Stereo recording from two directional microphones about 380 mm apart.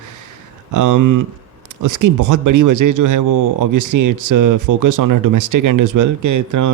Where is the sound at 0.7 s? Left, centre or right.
Right.